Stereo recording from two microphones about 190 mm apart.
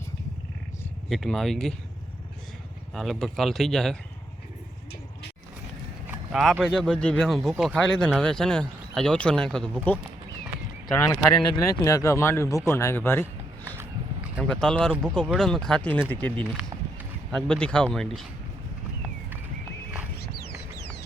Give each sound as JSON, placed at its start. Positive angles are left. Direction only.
{"t": 1.1, "sound": "speech", "side_deg": 0}
{"t": 2.9, "sound": "speech", "side_deg": 0}
{"t": 6.1, "sound": "speech", "side_deg": 0}
{"t": 14.4, "sound": "speech", "side_deg": 5}